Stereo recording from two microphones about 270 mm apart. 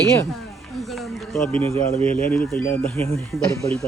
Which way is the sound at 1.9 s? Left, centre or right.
Right.